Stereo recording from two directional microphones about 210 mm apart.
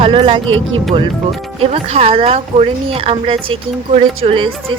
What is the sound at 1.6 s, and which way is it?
Speech, 30° right (ahead or behind).